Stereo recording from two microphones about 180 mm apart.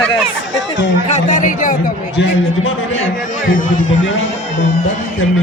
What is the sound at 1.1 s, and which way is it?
Speech, 45° left (ahead or behind).